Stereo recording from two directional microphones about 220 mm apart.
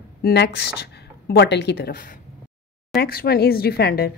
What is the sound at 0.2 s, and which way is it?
A woman's voice, 50° left (ahead or behind).